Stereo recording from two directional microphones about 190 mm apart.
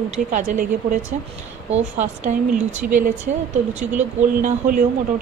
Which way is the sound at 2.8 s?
50° right (ahead or behind).